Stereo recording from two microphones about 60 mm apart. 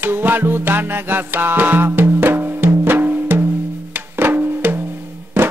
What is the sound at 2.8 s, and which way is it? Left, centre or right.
Wood block, right.